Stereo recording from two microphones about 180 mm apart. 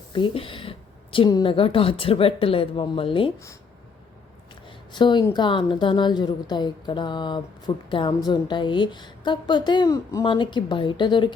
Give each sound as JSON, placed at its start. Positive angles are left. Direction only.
{"t": 0.1, "sound": "a woman's voice", "side_deg": 30}
{"t": 4.9, "sound": "a woman's voice", "side_deg": 25}